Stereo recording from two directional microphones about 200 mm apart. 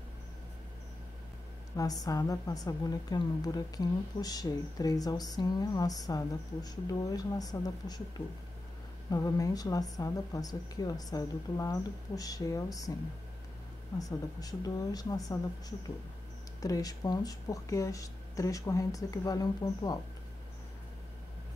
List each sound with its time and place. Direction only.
1.8 s a woman's voice: 15° left (ahead or behind)
9.1 s speech: 20° left (ahead or behind)
13.9 s speech: 20° left (ahead or behind)
16.6 s speech: 15° left (ahead or behind)